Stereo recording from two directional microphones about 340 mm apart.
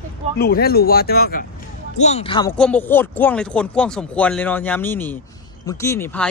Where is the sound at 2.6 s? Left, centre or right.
Centre.